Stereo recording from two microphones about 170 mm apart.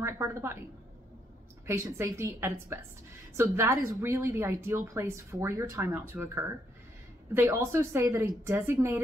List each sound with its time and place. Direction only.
0.0 s a woman's voice: 15° right (ahead or behind)
1.7 s a woman's voice: 15° right (ahead or behind)